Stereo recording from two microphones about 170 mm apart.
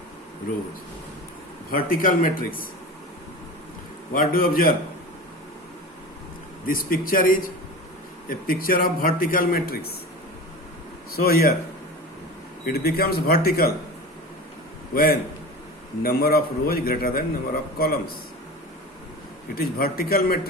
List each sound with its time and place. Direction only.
1.7 s a man's voice: 55° left (ahead or behind)
4.1 s a man's voice: 55° left (ahead or behind)
6.7 s a man's voice: 55° left (ahead or behind)
11.3 s a man's voice: 60° left (ahead or behind)
12.6 s a man's voice: 65° left (ahead or behind)
14.9 s a man's voice: 60° left (ahead or behind)
19.5 s a man's voice: 60° left (ahead or behind)